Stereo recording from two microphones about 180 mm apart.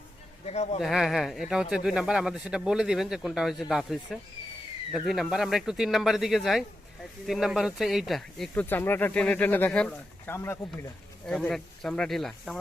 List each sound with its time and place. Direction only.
0.4 s speech: 35° left (ahead or behind)
0.8 s a man's voice: centre (ahead or behind)
11.3 s a man's voice: centre (ahead or behind)